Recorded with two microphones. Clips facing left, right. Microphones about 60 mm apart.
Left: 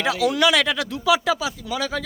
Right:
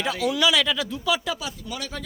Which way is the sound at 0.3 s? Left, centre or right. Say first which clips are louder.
Left 3 dB; left.